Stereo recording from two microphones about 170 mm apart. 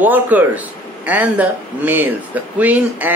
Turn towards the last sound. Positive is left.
turn(degrees=-10)  # may be behind; listen again after turning